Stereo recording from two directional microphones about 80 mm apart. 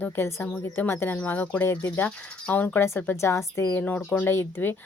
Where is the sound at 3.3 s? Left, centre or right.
Left.